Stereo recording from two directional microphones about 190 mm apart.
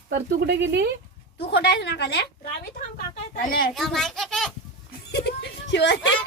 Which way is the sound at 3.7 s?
Centre (ahead or behind).